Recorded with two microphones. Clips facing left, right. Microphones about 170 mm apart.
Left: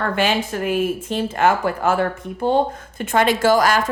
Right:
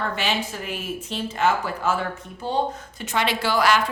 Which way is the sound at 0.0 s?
50° left (ahead or behind).